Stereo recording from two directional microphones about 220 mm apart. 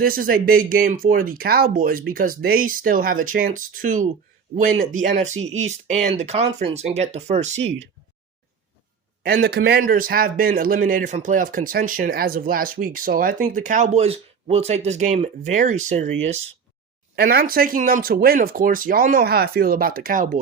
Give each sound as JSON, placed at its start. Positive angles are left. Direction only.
{"t": 0.0, "sound": "a man's voice", "side_deg": -40}
{"t": 9.2, "sound": "a man's voice", "side_deg": -45}
{"t": 17.2, "sound": "a man's voice", "side_deg": -45}